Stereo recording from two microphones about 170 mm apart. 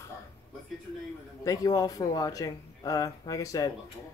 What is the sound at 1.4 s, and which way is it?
Speech, 20° left (ahead or behind).